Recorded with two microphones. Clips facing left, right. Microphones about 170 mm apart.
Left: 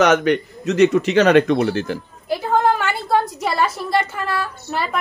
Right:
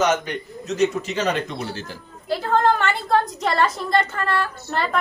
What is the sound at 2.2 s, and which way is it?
A woman's voice, 15° left (ahead or behind).